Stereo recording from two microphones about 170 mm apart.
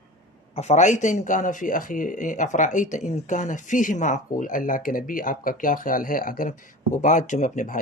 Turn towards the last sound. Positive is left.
turn(degrees=50)  # may be behind; listen again after turning